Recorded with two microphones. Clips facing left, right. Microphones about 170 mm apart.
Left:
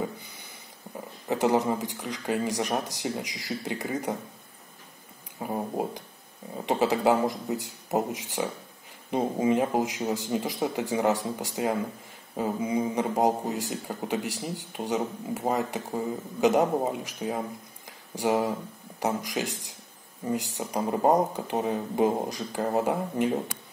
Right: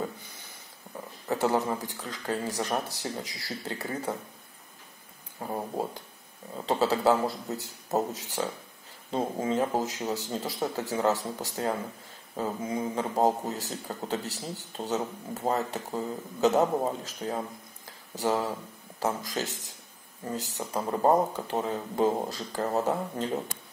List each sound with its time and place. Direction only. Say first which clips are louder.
1.3 s a man's voice: left 3 dB; 15° left (ahead or behind)
5.4 s a man's voice: left 2 dB; 15° left (ahead or behind)
17.8 s a sound: left 2 dB; 15° left (ahead or behind)
18.9 s a man's voice: left 2 dB; 15° left (ahead or behind)